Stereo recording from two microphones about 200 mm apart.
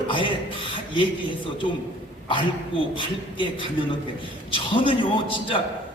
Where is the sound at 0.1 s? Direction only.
25° left (ahead or behind).